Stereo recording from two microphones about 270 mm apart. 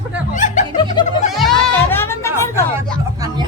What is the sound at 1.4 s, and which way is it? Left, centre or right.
Music, centre.